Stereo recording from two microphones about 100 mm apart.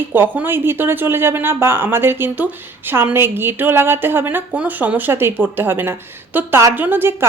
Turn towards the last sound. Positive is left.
turn(degrees=-20)  # may be behind; listen again after turning